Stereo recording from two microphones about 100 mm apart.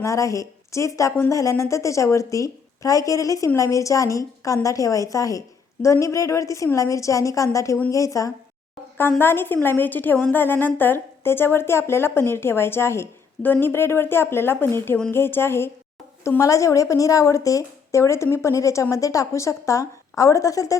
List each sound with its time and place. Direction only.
0.0 s a woman's voice: 35° left (ahead or behind)
9.0 s a woman's voice: 20° left (ahead or behind)